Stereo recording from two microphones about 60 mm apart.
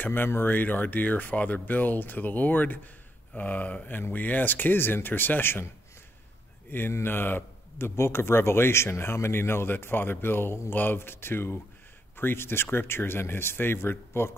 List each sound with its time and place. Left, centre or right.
0.0 s speech: left
6.7 s speech: left